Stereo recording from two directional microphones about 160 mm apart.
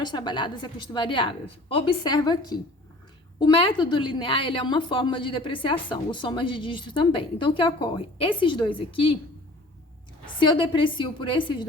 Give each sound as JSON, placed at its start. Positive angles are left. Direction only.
{"t": 0.0, "sound": "a woman's voice", "side_deg": 25}
{"t": 10.2, "sound": "a woman's voice", "side_deg": 30}